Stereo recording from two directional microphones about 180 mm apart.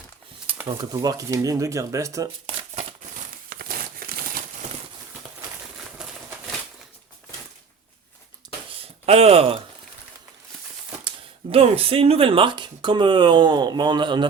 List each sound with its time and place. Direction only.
0.8 s speech: 20° right (ahead or behind)
3.5 s crumpling: 55° right (ahead or behind)
6.0 s a sound: 10° right (ahead or behind)
9.0 s speech: 35° right (ahead or behind)
11.5 s speech: 35° right (ahead or behind)